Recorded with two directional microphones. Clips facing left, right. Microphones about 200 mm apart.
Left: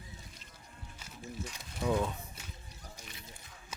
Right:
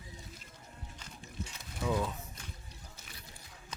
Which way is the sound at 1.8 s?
20° left (ahead or behind).